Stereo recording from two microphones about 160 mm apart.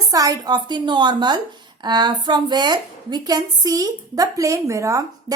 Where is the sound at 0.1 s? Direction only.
20° right (ahead or behind).